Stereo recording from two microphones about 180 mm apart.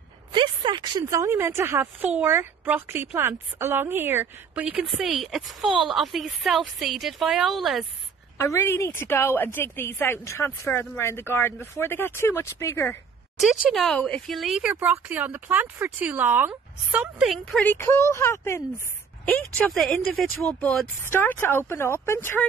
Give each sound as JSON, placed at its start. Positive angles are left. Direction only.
{"t": 0.3, "sound": "a woman's voice", "side_deg": -25}
{"t": 8.4, "sound": "speech", "side_deg": 15}
{"t": 13.4, "sound": "a woman's voice", "side_deg": 0}